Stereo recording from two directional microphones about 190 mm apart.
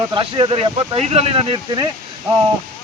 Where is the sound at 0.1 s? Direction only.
25° right (ahead or behind).